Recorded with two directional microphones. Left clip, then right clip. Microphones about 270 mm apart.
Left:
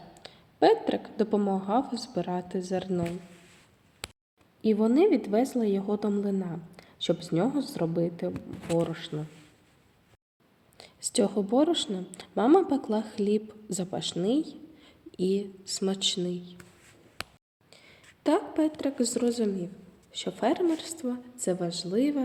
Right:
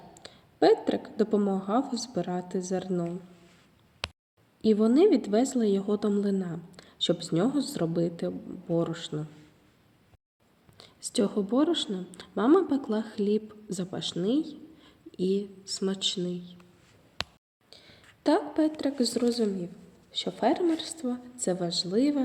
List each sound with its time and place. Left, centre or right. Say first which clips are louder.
0.2 s a woman's voice: left 1 dB; centre
4.6 s a woman's voice: right 1 dB; centre
10.8 s a woman's voice: left 2 dB; centre
17.7 s a sound: right 1 dB; centre
18.2 s a woman's voice: right 1 dB; centre